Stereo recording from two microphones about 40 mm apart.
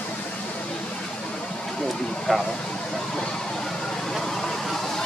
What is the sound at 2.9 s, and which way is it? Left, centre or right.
Vehicle, centre.